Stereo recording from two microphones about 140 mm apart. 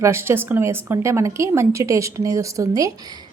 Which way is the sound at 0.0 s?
20° right (ahead or behind).